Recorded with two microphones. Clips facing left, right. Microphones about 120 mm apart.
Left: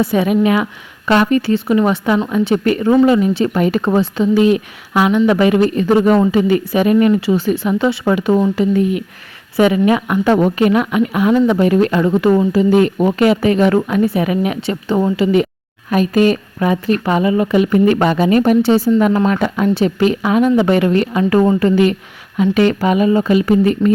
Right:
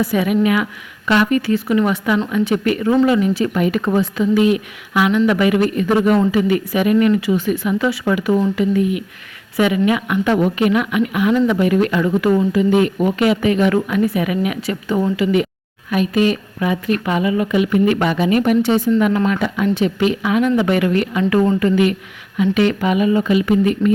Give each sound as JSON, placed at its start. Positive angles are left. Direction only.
{"t": 0.0, "sound": "a woman's voice", "side_deg": 25}
{"t": 15.9, "sound": "a woman's voice", "side_deg": 40}